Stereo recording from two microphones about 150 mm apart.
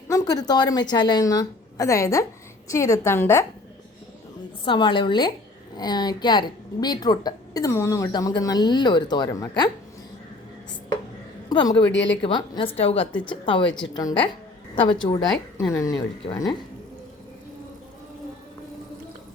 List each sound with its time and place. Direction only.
0.1 s a woman's voice: 25° left (ahead or behind)
4.6 s a woman's voice: 30° left (ahead or behind)
11.4 s a woman's voice: 25° left (ahead or behind)